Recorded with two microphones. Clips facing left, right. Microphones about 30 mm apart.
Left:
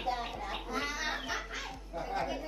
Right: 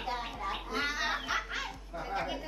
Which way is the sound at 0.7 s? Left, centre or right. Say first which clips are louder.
Right 2 dB; right.